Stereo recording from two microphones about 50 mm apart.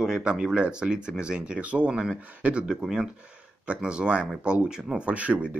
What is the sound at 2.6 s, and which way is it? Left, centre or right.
Speech, centre.